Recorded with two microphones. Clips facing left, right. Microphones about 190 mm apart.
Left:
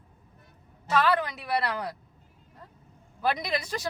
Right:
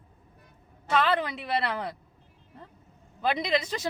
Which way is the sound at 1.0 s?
25° right (ahead or behind).